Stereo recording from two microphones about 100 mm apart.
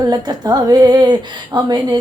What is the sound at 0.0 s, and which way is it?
A woman's voice, 40° right (ahead or behind).